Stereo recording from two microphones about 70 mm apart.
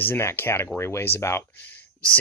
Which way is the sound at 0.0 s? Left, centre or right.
Left.